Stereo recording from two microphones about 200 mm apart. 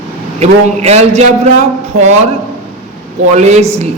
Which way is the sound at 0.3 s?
30° right (ahead or behind).